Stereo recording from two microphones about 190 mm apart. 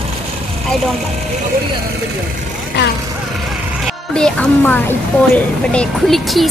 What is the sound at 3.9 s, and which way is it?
A woman's voice, 5° left (ahead or behind).